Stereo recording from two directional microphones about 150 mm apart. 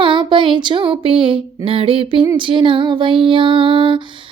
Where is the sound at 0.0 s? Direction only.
35° right (ahead or behind).